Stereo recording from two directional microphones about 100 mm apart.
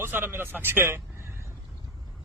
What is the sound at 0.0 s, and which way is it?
A man's voice, 25° right (ahead or behind).